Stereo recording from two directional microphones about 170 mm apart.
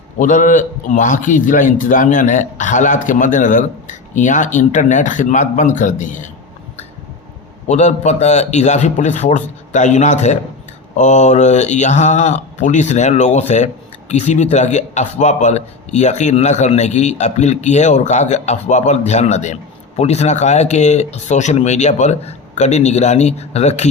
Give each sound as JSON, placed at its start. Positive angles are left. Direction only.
{"t": 0.2, "sound": "speech", "side_deg": 50}
{"t": 7.7, "sound": "speech", "side_deg": 45}